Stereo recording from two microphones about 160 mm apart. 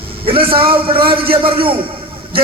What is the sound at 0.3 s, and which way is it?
Speech, 35° right (ahead or behind).